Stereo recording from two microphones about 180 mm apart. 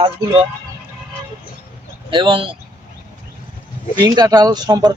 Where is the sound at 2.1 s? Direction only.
25° right (ahead or behind).